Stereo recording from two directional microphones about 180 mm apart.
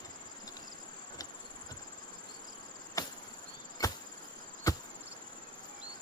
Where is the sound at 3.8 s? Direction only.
20° left (ahead or behind).